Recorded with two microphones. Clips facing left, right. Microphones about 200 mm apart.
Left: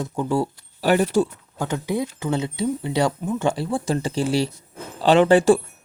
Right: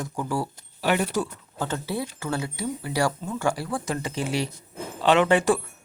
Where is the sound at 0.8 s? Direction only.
35° left (ahead or behind).